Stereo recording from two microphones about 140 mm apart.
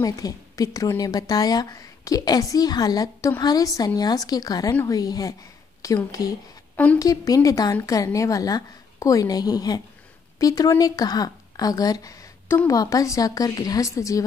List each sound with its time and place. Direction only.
0.0 s a woman's voice: 25° left (ahead or behind)